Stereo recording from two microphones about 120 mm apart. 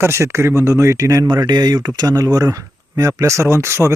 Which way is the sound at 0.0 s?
20° right (ahead or behind).